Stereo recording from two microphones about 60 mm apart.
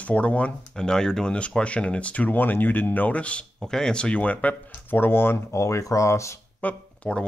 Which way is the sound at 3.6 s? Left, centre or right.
Centre.